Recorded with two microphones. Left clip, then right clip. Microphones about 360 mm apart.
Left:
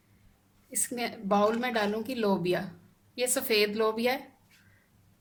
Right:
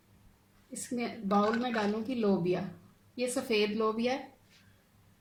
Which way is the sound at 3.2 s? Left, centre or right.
Left.